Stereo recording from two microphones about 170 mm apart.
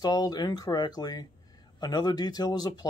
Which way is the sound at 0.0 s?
25° left (ahead or behind).